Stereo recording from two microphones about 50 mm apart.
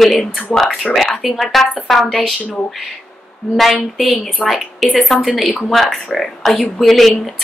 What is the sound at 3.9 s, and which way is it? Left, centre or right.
A woman's voice, centre.